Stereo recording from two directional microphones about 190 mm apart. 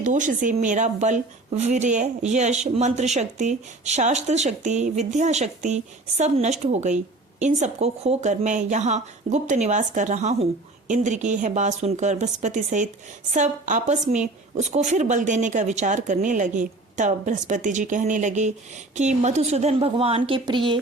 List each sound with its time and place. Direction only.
0.0 s speech: 40° right (ahead or behind); by 20.7 s 25° right (ahead or behind)